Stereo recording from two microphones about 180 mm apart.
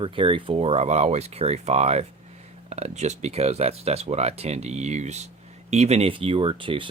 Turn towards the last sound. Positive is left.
turn(degrees=-30)  # may be behind; listen again after turning